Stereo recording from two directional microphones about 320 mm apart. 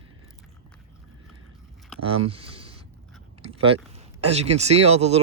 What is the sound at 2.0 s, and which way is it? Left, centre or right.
Speech, centre.